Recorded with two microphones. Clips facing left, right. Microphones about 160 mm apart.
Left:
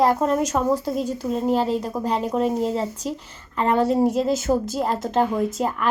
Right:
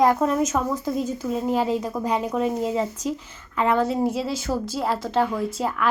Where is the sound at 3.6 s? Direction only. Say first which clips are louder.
Left 1 dB; 35° left (ahead or behind).